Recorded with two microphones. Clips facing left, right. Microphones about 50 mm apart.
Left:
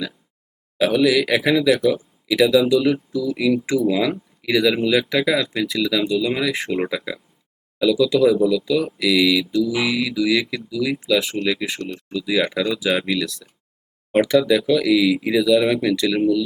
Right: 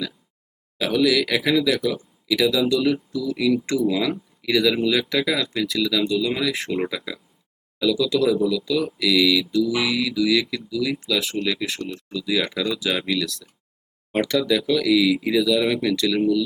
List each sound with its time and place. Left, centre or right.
0.8 s speech: centre
6.5 s speech: centre
6.9 s speech: centre
12.1 s speech: centre